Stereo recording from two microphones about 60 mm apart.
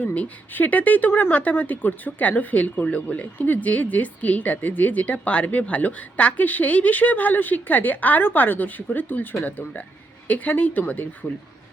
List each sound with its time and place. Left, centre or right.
0.0 s speech: left